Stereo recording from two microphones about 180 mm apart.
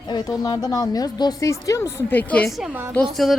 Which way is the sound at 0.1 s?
20° left (ahead or behind).